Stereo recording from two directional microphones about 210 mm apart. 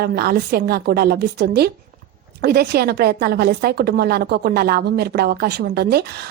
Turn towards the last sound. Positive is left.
turn(degrees=-50)  # may be behind; listen again after turning